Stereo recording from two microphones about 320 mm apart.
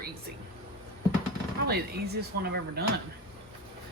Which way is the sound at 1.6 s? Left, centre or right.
Right.